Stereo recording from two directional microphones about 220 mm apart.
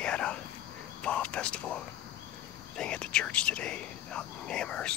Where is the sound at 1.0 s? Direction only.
5° left (ahead or behind).